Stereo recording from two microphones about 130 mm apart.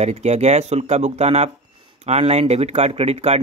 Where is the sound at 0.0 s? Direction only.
60° right (ahead or behind).